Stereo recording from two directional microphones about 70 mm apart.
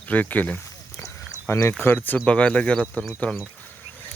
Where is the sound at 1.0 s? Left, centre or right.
Left.